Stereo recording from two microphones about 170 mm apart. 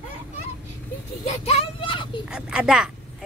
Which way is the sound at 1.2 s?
35° left (ahead or behind).